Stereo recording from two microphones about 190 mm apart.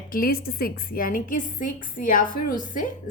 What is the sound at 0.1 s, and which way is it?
A woman's voice, 50° left (ahead or behind).